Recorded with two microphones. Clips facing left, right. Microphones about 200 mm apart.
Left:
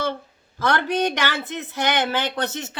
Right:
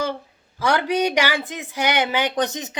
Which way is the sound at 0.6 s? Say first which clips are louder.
Right 1 dB; 10° right (ahead or behind).